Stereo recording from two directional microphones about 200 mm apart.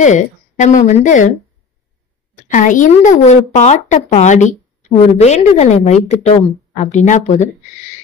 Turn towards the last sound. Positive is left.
turn(degrees=35)  # may be behind; listen again after turning